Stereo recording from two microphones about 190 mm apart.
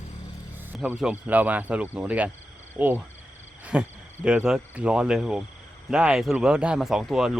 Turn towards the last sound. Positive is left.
turn(degrees=0)  # may be behind; listen again after turning